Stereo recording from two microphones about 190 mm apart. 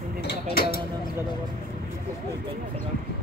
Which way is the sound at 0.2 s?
55° left (ahead or behind).